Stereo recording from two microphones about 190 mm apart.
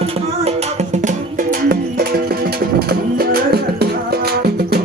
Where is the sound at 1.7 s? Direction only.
50° right (ahead or behind).